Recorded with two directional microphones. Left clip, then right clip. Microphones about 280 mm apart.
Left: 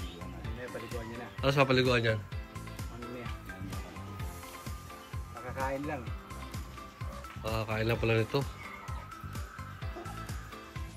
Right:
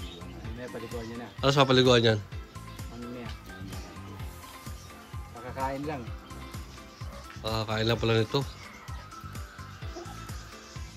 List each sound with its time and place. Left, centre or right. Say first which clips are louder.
1.4 s a man's voice: right 5 dB; centre
5.6 s music: right 2 dB; right
7.4 s a man's voice: right 4 dB; centre